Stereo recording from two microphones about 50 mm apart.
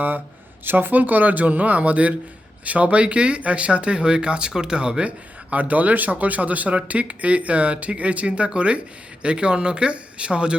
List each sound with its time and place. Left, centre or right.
0.6 s speech: right